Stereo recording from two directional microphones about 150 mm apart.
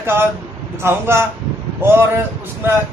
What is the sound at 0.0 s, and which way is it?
Speech, 15° right (ahead or behind).